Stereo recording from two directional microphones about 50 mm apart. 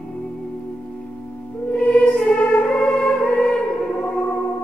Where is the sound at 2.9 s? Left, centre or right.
Centre.